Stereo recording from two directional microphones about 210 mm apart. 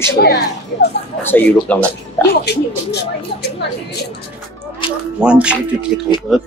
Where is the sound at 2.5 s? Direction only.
50° left (ahead or behind).